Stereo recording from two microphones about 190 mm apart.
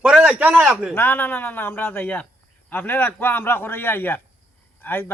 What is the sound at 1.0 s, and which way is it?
Speech, 10° left (ahead or behind).